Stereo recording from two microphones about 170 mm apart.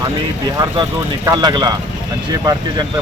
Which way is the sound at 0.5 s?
20° right (ahead or behind).